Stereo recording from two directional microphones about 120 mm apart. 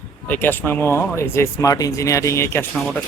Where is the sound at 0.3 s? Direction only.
15° left (ahead or behind).